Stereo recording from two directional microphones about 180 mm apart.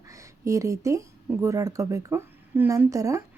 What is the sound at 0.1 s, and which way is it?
Speech, 20° right (ahead or behind).